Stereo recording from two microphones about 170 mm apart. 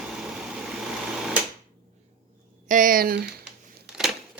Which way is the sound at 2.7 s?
55° right (ahead or behind).